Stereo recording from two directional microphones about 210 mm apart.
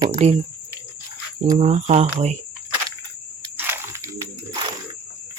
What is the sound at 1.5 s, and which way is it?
Speech, 30° right (ahead or behind).